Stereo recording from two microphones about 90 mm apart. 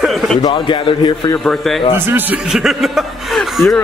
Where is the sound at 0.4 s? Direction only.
60° left (ahead or behind).